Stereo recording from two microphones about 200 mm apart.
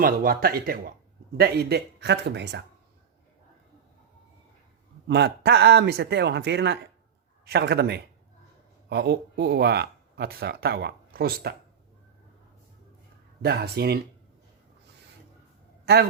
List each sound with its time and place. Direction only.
0.0 s speech: 45° right (ahead or behind)
5.0 s speech: 55° right (ahead or behind)
13.4 s speech: 55° right (ahead or behind)